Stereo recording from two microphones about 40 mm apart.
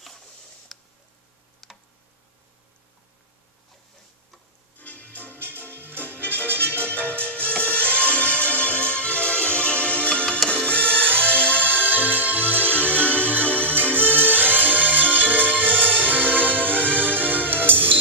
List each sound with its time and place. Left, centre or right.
0.7 s tick: centre
4.7 s music: left
5.8 s music: right
6.9 s music: left
10.9 s music: right
11.2 s music: left
11.7 s music: right